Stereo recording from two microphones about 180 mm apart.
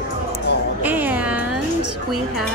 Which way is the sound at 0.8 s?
10° right (ahead or behind).